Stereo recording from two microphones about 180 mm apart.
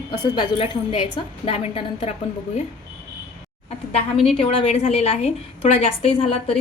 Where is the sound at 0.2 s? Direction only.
25° left (ahead or behind).